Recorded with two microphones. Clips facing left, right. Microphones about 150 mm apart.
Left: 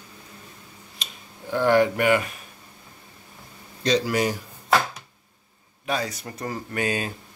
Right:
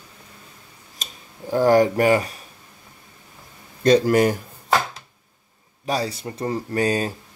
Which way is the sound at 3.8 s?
50° right (ahead or behind).